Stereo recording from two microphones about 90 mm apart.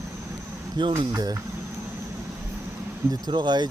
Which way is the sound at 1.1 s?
45° right (ahead or behind).